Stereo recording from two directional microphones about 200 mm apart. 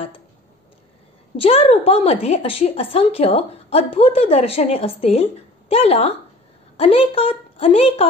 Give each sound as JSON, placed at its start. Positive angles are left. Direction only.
{"t": 1.3, "sound": "a woman's voice", "side_deg": 30}